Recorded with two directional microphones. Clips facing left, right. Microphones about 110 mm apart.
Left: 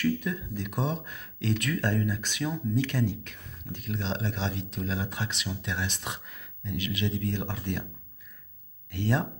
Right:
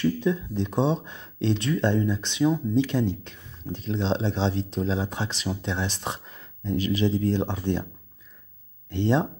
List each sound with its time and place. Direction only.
0.0 s speech: 25° right (ahead or behind)
8.9 s speech: 25° right (ahead or behind)